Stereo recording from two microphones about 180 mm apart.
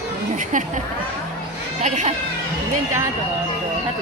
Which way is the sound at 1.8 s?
40° right (ahead or behind).